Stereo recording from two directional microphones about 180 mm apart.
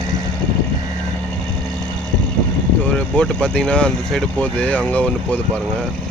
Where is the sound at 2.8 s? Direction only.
5° left (ahead or behind).